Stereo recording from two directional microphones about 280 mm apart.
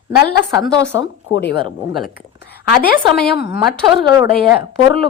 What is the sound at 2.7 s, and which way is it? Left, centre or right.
Speech, left.